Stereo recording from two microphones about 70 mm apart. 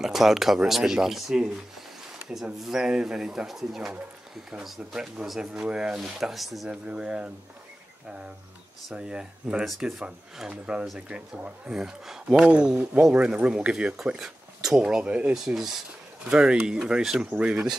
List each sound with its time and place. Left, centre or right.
0.0 s speech: centre
6.7 s speech: centre
8.9 s speech: centre
15.3 s speech: centre